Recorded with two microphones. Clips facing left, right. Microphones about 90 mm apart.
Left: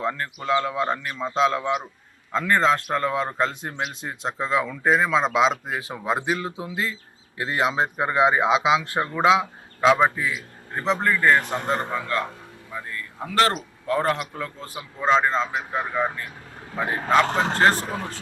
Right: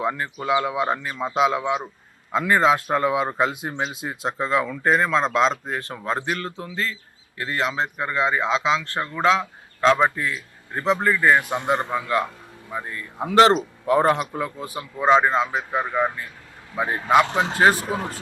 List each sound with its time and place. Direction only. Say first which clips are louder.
0.0 s a man's voice: right 2 dB; 10° right (ahead or behind)
12.7 s a man's voice: right 3 dB; 20° right (ahead or behind)
17.2 s a man's voice: even; 45° left (ahead or behind)
17.6 s a man's voice: right 3 dB; 10° right (ahead or behind)